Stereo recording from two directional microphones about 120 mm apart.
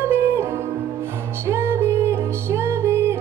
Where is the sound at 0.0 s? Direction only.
20° right (ahead or behind).